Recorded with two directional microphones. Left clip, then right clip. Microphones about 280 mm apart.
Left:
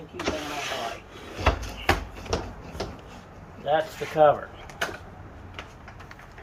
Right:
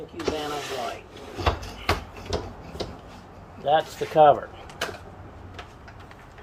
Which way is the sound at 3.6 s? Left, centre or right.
Right.